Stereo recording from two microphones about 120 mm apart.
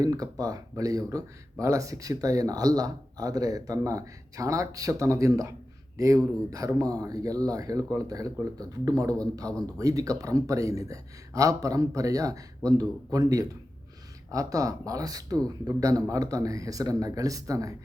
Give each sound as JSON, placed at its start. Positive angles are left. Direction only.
{"t": 0.0, "sound": "speech", "side_deg": -30}